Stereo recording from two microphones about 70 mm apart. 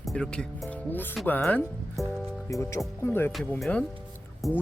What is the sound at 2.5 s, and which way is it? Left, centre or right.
Speech, left.